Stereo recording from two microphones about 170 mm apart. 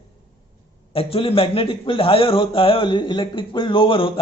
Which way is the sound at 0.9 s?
35° left (ahead or behind).